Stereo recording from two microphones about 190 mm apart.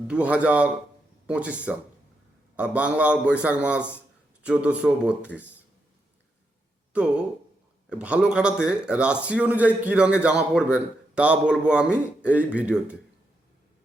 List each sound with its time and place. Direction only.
0.1 s a man's voice: 5° right (ahead or behind)
6.9 s a man's voice: 5° right (ahead or behind)